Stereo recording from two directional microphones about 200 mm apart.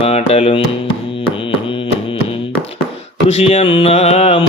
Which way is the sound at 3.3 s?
35° left (ahead or behind).